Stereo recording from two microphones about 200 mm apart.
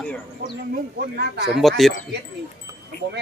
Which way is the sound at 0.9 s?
50° right (ahead or behind).